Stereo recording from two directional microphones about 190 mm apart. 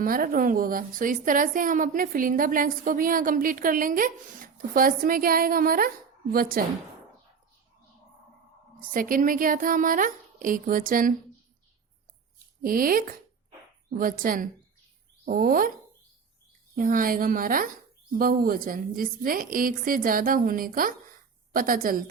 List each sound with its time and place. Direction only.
0.0 s a woman's voice: 50° right (ahead or behind)
8.8 s a woman's voice: 45° right (ahead or behind)
12.6 s a woman's voice: 50° right (ahead or behind)
16.7 s a woman's voice: 45° right (ahead or behind)